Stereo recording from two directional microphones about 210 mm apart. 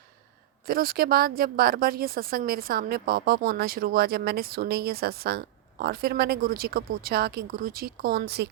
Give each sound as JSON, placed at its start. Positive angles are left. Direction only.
{"t": 0.7, "sound": "speech", "side_deg": -45}